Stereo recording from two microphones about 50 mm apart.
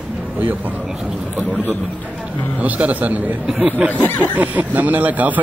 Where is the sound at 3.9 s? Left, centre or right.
Left.